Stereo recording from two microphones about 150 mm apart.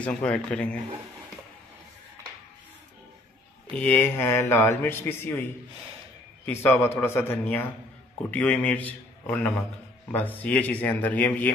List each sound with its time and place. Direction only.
0.0 s a man's voice: 5° left (ahead or behind)
3.7 s a man's voice: 10° left (ahead or behind)